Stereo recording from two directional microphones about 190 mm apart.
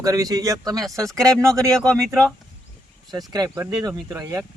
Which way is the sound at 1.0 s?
5° left (ahead or behind).